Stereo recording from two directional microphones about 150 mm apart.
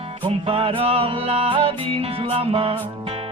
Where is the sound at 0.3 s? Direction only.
40° right (ahead or behind).